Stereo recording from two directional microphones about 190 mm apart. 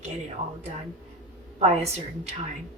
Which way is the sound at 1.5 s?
35° right (ahead or behind).